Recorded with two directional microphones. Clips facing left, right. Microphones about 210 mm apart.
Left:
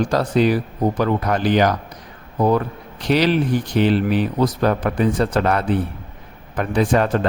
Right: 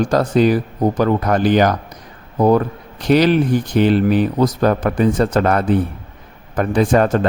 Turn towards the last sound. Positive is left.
turn(degrees=-45)  # may be behind; listen again after turning